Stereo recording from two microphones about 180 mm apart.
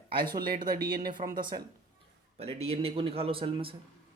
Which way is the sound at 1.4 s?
25° right (ahead or behind).